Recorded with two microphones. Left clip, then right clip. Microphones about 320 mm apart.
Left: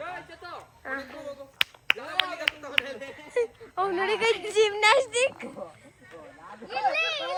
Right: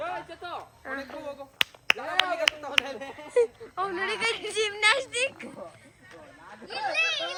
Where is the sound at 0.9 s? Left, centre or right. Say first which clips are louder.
Left 2 dB; centre.